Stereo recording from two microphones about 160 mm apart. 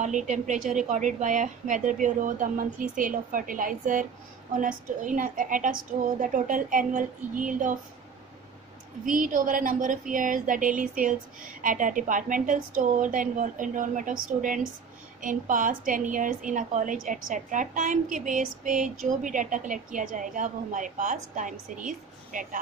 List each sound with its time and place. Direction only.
0.0 s a woman's voice: 50° right (ahead or behind)
9.0 s a woman's voice: 55° right (ahead or behind)